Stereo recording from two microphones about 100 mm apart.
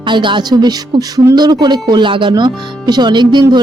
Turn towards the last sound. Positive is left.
turn(degrees=-50)  # may be behind; listen again after turning